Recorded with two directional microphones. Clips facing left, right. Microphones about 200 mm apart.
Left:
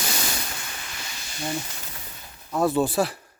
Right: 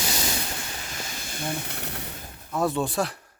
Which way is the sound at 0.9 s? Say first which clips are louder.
Right 4 dB; 45° right (ahead or behind).